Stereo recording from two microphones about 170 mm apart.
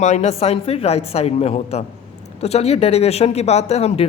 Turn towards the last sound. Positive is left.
turn(degrees=35)  # may be behind; listen again after turning